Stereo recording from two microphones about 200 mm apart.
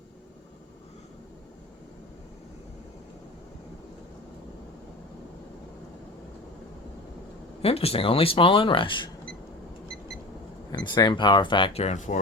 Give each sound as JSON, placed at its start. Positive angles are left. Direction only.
{"t": 7.6, "sound": "speech", "side_deg": 30}
{"t": 10.7, "sound": "speech", "side_deg": 20}